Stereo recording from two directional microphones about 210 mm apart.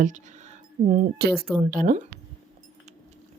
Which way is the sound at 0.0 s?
35° right (ahead or behind).